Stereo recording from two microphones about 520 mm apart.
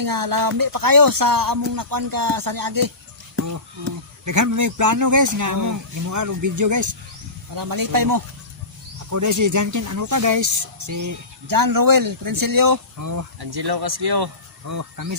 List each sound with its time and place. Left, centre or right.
0.0 s speech: right
14.7 s speech: right